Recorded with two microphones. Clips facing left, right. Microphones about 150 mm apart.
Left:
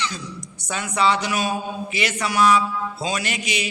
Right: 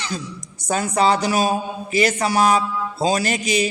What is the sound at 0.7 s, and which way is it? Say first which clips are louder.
A man's voice: right 3 dB; 40° right (ahead or behind).